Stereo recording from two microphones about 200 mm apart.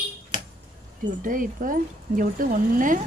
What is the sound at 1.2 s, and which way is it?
Speech, 40° right (ahead or behind).